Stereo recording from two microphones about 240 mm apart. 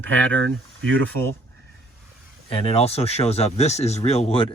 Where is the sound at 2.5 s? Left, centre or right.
Left.